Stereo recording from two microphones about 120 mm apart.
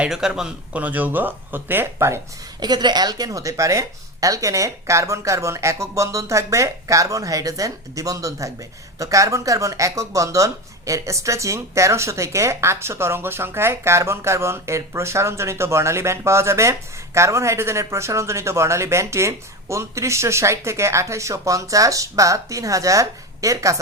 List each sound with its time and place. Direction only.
0.0 s speech: 5° right (ahead or behind); by 2.2 s 20° right (ahead or behind)
2.6 s speech: 35° right (ahead or behind)